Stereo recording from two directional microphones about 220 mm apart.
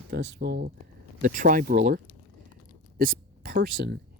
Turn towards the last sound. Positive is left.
turn(degrees=-45)  # may be behind; listen again after turning